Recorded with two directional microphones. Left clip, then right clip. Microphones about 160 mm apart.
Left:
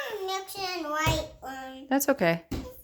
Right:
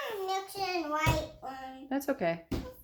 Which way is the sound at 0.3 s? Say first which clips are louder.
Left 1 dB; 50° left (ahead or behind).